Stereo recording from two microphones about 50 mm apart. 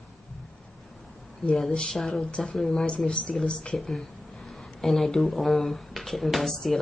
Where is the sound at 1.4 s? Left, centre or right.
Centre.